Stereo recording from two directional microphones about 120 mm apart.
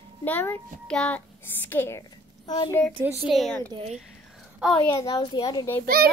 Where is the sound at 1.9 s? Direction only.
35° left (ahead or behind).